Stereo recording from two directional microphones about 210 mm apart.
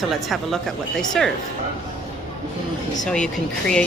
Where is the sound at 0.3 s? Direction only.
Centre (ahead or behind).